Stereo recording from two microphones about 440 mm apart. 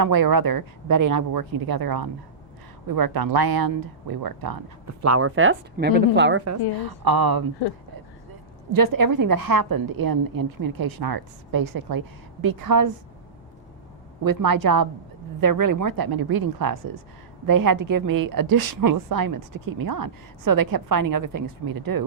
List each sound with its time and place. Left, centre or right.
0.0 s a woman's voice: right
5.0 s speech: right
6.7 s a woman's voice: right
8.7 s a woman's voice: right
14.3 s a woman's voice: right